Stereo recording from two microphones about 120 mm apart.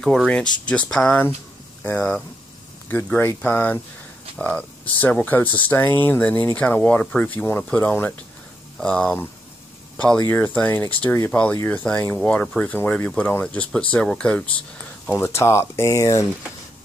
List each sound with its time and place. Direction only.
0.0 s speech: 5° left (ahead or behind); by 11.8 s 20° left (ahead or behind)
12.2 s speech: 10° left (ahead or behind)
15.0 s speech: 20° left (ahead or behind)